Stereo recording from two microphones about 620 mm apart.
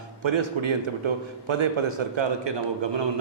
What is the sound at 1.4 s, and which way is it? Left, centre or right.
A man's voice, right.